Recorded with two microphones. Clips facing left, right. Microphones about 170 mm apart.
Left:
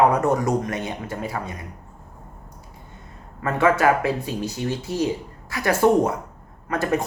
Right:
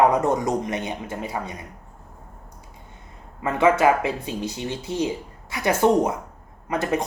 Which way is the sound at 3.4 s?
20° right (ahead or behind).